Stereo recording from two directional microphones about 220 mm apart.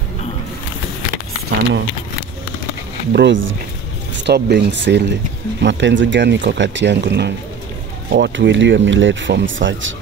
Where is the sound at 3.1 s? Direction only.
55° right (ahead or behind).